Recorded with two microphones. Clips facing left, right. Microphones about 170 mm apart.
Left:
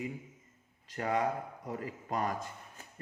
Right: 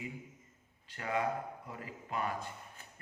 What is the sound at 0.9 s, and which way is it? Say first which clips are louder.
Speech: left 3 dB; 40° left (ahead or behind).